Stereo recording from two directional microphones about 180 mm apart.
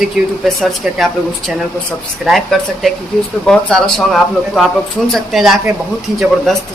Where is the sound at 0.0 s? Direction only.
Centre (ahead or behind).